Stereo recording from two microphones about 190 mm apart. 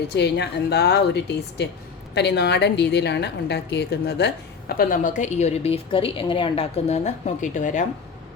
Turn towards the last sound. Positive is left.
turn(degrees=40)  # may be behind; listen again after turning